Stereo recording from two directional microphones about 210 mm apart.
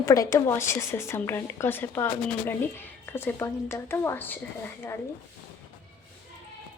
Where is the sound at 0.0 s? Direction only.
15° left (ahead or behind).